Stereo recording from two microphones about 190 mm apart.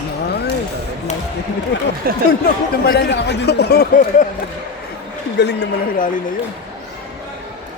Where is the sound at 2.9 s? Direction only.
60° left (ahead or behind).